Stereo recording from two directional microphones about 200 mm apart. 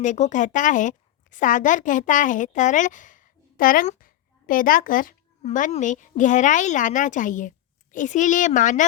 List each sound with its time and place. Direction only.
0.0 s a woman's voice: 40° left (ahead or behind)